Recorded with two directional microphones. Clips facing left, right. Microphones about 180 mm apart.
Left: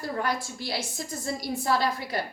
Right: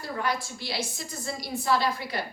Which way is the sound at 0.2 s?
45° left (ahead or behind).